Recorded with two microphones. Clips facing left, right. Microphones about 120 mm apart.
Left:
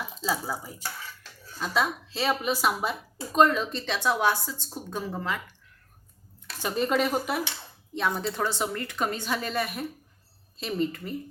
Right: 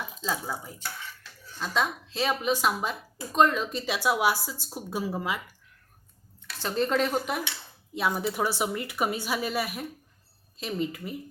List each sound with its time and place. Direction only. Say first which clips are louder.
0.2 s speech: left 2 dB; 5° left (ahead or behind); by 5.4 s 10° right (ahead or behind)
6.6 s speech: even; 10° left (ahead or behind)
7.9 s speech: right 1 dB; 10° right (ahead or behind)